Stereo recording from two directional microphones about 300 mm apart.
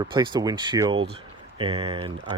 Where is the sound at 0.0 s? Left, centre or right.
Centre.